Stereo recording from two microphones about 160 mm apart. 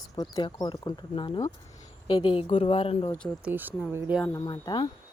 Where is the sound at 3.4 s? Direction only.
10° right (ahead or behind).